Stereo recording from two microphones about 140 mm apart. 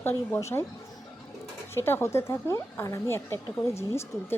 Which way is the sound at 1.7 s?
15° left (ahead or behind).